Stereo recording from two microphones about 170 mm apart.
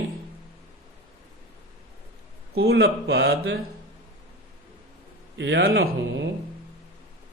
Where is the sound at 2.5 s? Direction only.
75° right (ahead or behind).